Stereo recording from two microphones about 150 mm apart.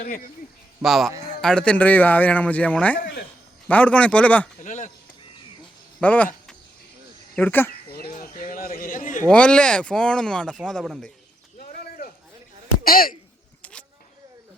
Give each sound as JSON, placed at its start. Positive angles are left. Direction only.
{"t": 0.0, "sound": "speech", "side_deg": 60}
{"t": 0.8, "sound": "a man's voice", "side_deg": 0}
{"t": 4.6, "sound": "speech", "side_deg": 55}
{"t": 6.0, "sound": "a sound", "side_deg": 10}
{"t": 7.3, "sound": "a man's voice", "side_deg": 10}
{"t": 7.9, "sound": "a sound", "side_deg": 90}
{"t": 9.2, "sound": "speech", "side_deg": 5}
{"t": 11.7, "sound": "a sound", "side_deg": 80}
{"t": 12.8, "sound": "speech", "side_deg": 75}